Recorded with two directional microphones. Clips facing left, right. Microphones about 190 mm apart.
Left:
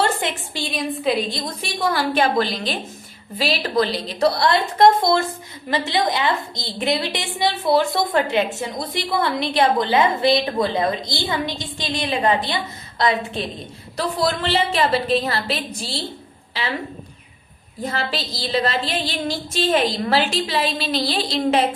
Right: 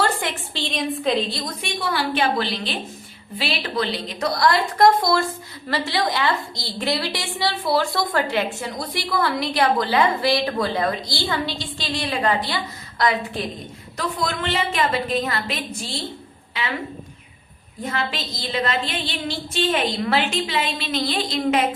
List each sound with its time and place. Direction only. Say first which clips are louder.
0.0 s a sound: left 2 dB; 20° left (ahead or behind)
0.6 s a woman's voice: left 1 dB; centre (ahead or behind)
1.5 s a woman's voice: left 3 dB; 40° left (ahead or behind)
17.8 s a woman's voice: left 1 dB; 35° left (ahead or behind)